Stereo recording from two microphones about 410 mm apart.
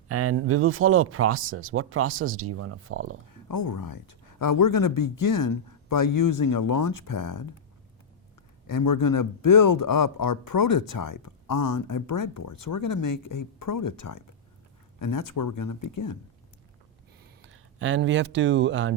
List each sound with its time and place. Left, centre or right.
0.1 s speech: right
3.5 s speech: left
8.6 s speech: left
17.4 s speech: right